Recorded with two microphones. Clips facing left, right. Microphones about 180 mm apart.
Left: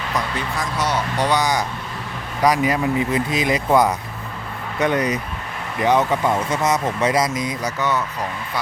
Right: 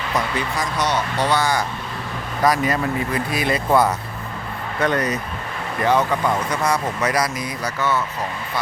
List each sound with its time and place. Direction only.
0.1 s speech: centre (ahead or behind); by 8.0 s 15° left (ahead or behind)